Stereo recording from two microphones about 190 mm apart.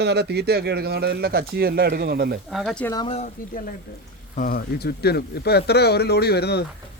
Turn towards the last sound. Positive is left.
turn(degrees=60)  # may be behind; listen again after turning